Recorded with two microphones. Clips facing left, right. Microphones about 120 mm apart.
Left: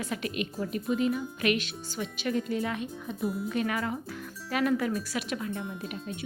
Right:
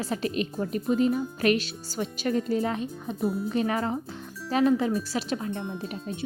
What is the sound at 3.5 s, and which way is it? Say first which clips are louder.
Speech: right 4 dB; 30° right (ahead or behind).